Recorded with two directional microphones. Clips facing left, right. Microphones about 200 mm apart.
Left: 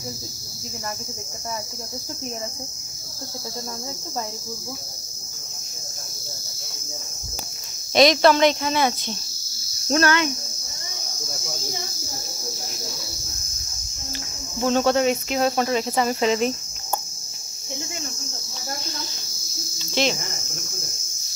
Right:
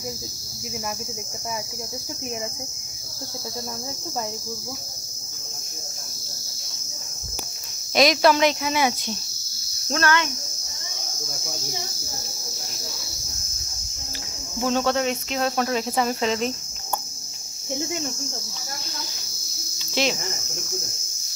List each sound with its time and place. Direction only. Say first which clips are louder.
7.9 s cricket: left 2 dB; 5° right (ahead or behind)
9.8 s cricket: left 3 dB; 15° left (ahead or behind)
14.6 s cricket: left 3 dB; centre (ahead or behind)
19.9 s cricket: left 1 dB; 5° right (ahead or behind)